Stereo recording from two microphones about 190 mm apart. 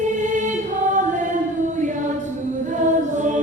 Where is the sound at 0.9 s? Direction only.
40° right (ahead or behind).